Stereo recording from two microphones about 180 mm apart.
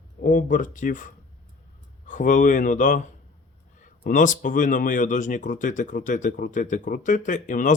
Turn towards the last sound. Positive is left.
turn(degrees=45)  # may be behind; listen again after turning